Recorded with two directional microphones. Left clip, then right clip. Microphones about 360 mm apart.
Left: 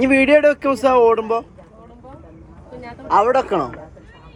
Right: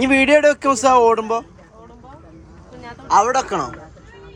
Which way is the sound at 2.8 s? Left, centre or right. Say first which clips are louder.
Even; centre.